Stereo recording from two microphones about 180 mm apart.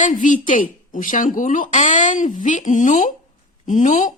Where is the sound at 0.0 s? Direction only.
45° left (ahead or behind).